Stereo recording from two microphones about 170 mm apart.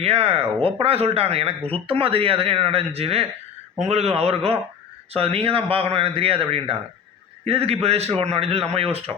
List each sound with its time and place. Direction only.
0.0 s speech: 35° right (ahead or behind)